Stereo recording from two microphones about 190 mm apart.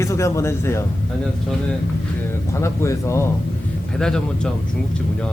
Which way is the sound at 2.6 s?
15° left (ahead or behind).